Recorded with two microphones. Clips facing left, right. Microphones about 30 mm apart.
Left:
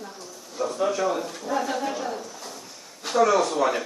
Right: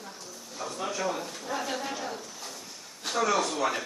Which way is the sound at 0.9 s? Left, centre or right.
Centre.